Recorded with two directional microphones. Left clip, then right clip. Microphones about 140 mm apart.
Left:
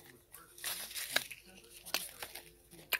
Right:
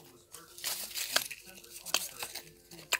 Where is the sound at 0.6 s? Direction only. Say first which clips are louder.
Right 4 dB; 15° left (ahead or behind).